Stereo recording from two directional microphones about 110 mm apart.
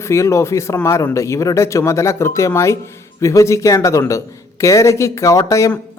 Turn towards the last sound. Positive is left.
turn(degrees=30)  # may be behind; listen again after turning